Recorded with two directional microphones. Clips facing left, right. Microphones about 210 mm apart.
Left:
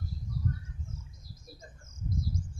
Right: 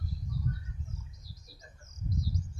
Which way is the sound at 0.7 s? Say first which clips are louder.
Even; 50° left (ahead or behind).